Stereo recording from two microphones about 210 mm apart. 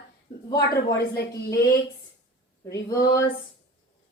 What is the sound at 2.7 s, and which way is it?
Speech, 15° left (ahead or behind).